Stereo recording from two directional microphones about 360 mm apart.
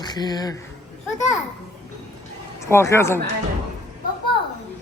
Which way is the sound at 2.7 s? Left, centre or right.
Centre.